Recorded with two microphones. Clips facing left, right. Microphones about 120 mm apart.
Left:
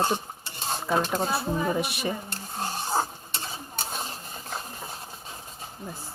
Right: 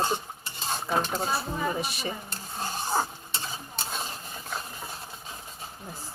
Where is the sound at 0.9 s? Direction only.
50° left (ahead or behind).